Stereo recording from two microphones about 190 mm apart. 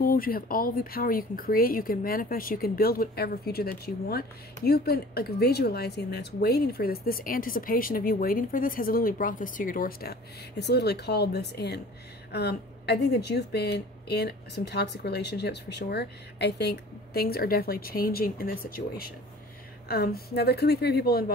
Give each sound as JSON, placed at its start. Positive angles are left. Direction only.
{"t": 0.0, "sound": "speech", "side_deg": 50}